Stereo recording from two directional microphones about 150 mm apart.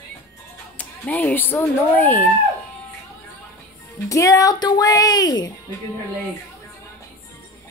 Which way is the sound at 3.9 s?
20° left (ahead or behind).